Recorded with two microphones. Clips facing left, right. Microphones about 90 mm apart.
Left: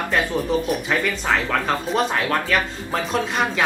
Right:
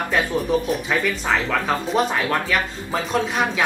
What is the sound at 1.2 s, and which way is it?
Speech, 5° right (ahead or behind).